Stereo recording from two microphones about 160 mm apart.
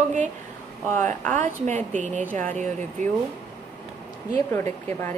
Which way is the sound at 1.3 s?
50° right (ahead or behind).